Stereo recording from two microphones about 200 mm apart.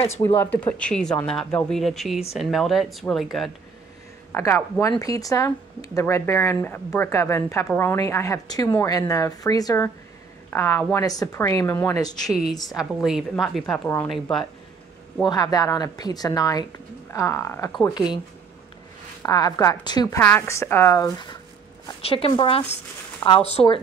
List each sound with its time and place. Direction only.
0.4 s speech: 10° left (ahead or behind)
4.3 s speech: 10° left (ahead or behind)
12.6 s speech: centre (ahead or behind)
15.2 s a woman's voice: 20° left (ahead or behind)
19.2 s a woman's voice: 20° left (ahead or behind)
20.2 s a woman's voice: 10° left (ahead or behind); by 23.8 s 30° left (ahead or behind)